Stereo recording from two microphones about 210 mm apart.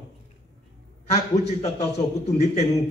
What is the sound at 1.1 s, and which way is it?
A man's voice, 30° left (ahead or behind).